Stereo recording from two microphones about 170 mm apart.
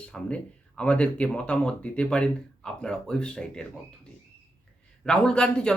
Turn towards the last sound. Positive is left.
turn(degrees=5)  # may be behind; listen again after turning